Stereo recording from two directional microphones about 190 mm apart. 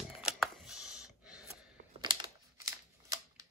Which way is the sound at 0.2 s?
5° right (ahead or behind).